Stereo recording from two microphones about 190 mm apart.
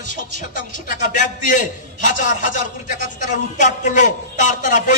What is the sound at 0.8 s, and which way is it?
A man's voice, 45° left (ahead or behind).